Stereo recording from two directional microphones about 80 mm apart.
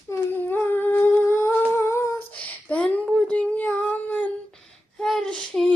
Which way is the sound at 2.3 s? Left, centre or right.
Centre.